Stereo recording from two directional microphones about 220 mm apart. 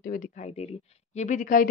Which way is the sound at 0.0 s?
40° left (ahead or behind).